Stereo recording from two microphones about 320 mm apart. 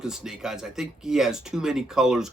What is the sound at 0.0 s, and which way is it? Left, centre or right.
Speech, centre.